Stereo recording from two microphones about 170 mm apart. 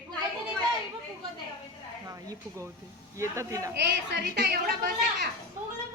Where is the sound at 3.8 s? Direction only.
85° right; by 4.9 s 65° right (ahead or behind).